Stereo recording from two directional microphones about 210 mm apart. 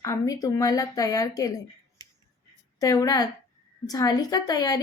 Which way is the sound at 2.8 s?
15° left (ahead or behind).